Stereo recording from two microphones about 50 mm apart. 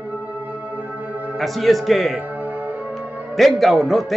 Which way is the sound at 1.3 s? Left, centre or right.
Centre.